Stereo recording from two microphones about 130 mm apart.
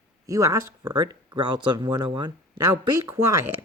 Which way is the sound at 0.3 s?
25° right (ahead or behind).